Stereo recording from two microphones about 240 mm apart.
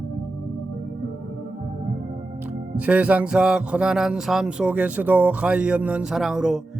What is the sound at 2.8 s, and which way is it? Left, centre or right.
Speech, centre.